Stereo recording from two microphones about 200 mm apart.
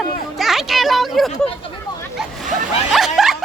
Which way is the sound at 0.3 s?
Centre (ahead or behind).